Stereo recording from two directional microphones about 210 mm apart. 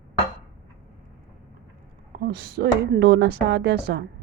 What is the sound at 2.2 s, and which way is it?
Speech, 50° right (ahead or behind).